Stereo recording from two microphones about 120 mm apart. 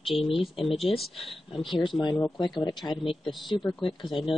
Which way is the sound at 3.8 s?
45° left (ahead or behind).